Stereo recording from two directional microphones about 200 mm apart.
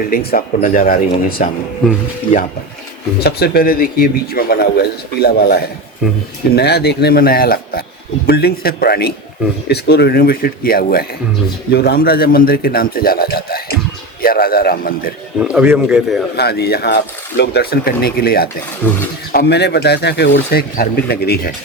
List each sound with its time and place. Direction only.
0.1 s a man's voice: 50° left (ahead or behind)
3.2 s a man's voice: 50° left (ahead or behind)
6.0 s a man's voice: centre (ahead or behind)
6.6 s a man's voice: 55° left (ahead or behind)
15.4 s a man's voice: 5° right (ahead or behind)
16.3 s a man's voice: 55° left (ahead or behind)